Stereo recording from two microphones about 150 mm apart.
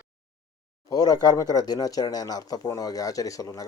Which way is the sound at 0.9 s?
25° left (ahead or behind).